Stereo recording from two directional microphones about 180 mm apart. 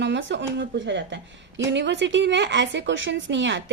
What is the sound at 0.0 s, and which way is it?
A woman's voice, 85° right.